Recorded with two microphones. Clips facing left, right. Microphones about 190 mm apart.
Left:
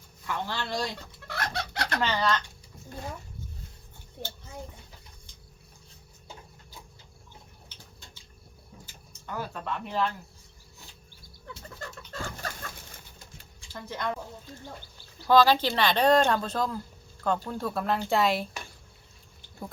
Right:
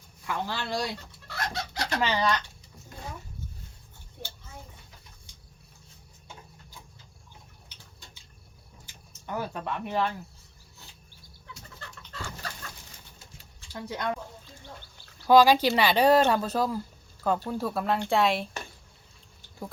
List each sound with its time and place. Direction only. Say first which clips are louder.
0.3 s speech: right 1 dB; 15° right (ahead or behind)
1.3 s chicken: left 1 dB; 60° left (ahead or behind)
2.0 s speech: right 1 dB; 15° right (ahead or behind)
8.9 s speech: right 4 dB; 15° right (ahead or behind)
11.8 s bird: left 4 dB; 45° left (ahead or behind)
13.7 s speech: right 3 dB; 10° right (ahead or behind)
15.3 s speech: right 2 dB; 10° right (ahead or behind)